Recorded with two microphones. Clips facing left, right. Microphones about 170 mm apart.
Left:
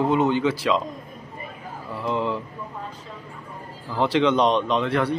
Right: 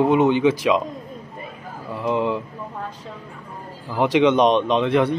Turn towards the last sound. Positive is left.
turn(degrees=-20)  # may be behind; listen again after turning